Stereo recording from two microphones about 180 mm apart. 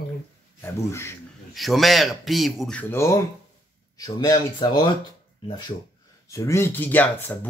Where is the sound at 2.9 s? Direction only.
15° left (ahead or behind).